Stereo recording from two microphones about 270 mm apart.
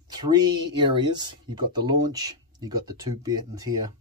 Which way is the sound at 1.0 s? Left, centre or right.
Centre.